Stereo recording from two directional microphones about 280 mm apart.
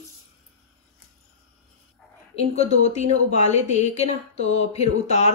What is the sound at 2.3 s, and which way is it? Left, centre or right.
Speech, left.